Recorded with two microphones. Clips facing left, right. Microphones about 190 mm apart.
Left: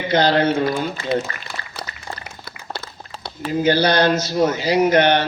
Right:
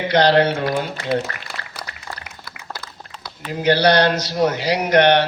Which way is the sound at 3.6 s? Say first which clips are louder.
Right 1 dB; 70° right (ahead or behind).